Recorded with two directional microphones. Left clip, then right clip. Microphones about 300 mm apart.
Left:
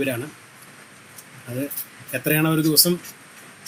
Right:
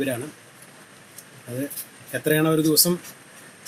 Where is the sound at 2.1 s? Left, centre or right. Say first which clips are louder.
Right 1 dB; left.